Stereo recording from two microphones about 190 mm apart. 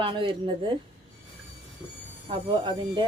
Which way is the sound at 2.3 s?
25° right (ahead or behind).